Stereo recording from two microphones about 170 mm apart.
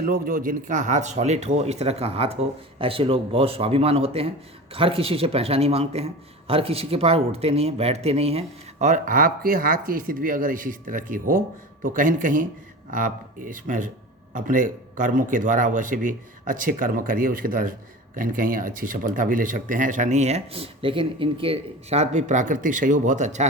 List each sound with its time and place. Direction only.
0.0 s speech: 60° right (ahead or behind); by 23.5 s 45° right (ahead or behind)